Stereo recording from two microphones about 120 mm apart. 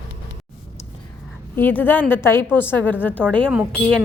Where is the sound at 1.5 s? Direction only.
15° left (ahead or behind).